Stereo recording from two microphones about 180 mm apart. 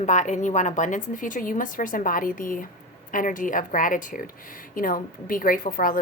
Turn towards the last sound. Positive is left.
turn(degrees=50)  # may be behind; listen again after turning